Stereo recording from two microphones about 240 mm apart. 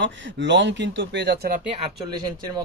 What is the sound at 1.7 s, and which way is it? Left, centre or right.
Speech, right.